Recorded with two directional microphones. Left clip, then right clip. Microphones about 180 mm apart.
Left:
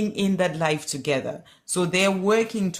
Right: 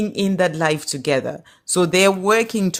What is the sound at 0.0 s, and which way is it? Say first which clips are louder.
Speech: right 5 dB; 35° right (ahead or behind).